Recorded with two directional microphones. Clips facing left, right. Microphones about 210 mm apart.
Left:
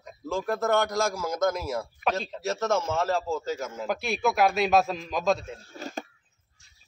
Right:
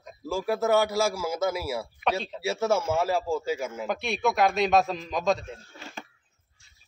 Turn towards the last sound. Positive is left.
turn(degrees=40)  # may be behind; listen again after turning